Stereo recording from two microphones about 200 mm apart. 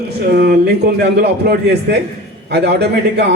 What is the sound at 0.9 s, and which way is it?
A man's voice, 55° right (ahead or behind).